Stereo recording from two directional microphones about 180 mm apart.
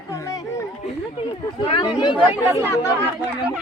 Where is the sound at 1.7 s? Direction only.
25° left (ahead or behind).